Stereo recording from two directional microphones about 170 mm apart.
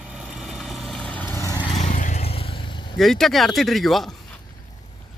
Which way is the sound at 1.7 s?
45° left (ahead or behind).